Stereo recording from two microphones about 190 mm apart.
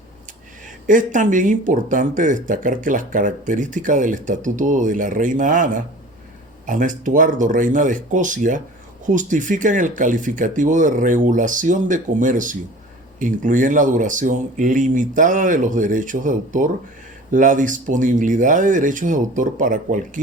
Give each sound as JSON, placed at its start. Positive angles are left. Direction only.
{"t": 0.9, "sound": "speech", "side_deg": -45}